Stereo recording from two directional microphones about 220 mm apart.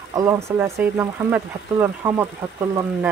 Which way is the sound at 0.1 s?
15° right (ahead or behind).